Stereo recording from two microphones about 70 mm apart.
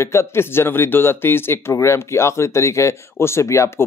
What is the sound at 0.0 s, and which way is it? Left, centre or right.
Speech, left.